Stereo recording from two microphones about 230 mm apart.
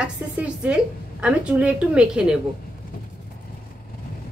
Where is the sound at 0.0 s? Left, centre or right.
Centre.